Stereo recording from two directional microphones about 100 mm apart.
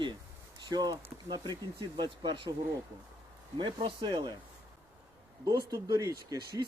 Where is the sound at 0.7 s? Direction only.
40° right (ahead or behind).